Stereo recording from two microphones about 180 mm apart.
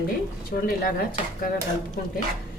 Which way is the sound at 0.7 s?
55° left (ahead or behind).